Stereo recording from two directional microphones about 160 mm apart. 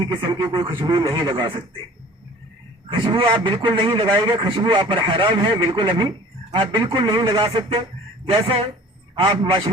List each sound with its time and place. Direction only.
0.0 s speech: 30° right (ahead or behind)
2.9 s a man's voice: 30° right (ahead or behind)